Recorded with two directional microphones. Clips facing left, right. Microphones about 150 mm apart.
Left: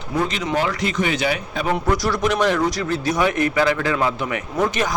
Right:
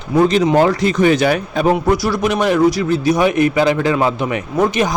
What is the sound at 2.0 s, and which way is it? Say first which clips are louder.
A man's voice: right 3 dB; 10° right (ahead or behind).